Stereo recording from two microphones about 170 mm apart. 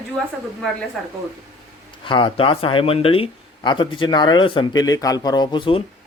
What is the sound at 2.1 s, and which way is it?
A man's voice, 30° left (ahead or behind).